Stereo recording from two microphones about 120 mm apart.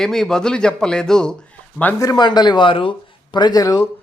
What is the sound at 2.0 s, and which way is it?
Speech, 35° left (ahead or behind).